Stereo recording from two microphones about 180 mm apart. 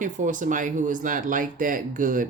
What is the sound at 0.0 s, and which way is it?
Speech, 45° right (ahead or behind).